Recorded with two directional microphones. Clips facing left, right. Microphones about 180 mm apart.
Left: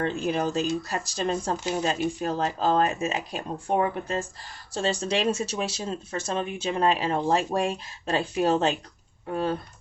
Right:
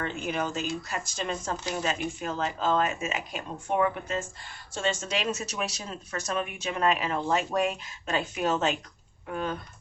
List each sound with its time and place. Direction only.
0.0 s speech: 35° left (ahead or behind)